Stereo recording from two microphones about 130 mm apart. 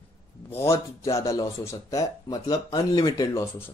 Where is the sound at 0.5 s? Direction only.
20° left (ahead or behind).